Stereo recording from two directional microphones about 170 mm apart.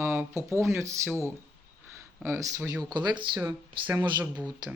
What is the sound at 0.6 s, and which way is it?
Speech, 15° right (ahead or behind).